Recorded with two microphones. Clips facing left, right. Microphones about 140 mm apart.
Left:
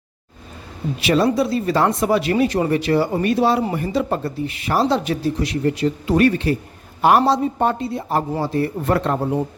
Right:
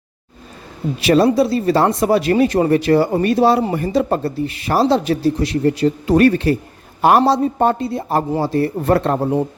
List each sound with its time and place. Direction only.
1.0 s speech: 40° right (ahead or behind)